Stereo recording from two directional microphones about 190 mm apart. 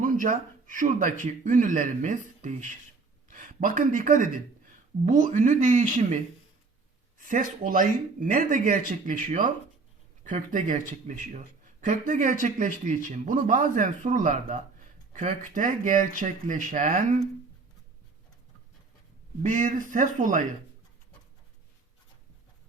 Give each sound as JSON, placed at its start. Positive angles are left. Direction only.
{"t": 0.0, "sound": "a man's voice", "side_deg": -45}
{"t": 7.2, "sound": "a man's voice", "side_deg": -45}
{"t": 19.4, "sound": "speech", "side_deg": -40}